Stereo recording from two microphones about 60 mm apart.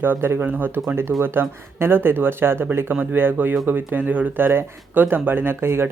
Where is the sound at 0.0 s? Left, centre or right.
Right.